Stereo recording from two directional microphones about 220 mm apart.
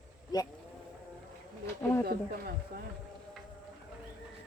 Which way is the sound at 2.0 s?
45° right (ahead or behind).